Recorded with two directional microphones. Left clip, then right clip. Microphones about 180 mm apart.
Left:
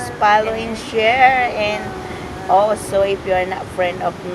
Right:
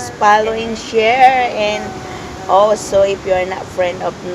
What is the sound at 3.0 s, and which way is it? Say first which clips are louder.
Speech: right 3 dB; 20° right (ahead or behind).